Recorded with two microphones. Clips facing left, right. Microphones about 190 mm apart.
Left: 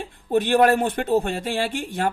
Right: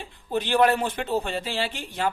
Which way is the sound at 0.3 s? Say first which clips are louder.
Left 4 dB; 50° left (ahead or behind).